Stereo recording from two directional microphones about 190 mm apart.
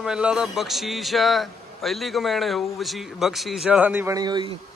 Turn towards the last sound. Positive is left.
turn(degrees=-25)  # may be behind; listen again after turning